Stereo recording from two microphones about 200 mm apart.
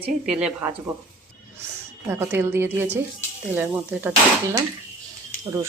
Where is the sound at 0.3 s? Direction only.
5° right (ahead or behind).